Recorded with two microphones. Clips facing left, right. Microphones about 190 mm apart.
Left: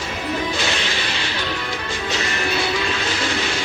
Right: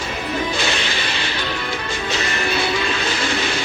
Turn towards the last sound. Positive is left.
turn(degrees=-60)  # may be behind; listen again after turning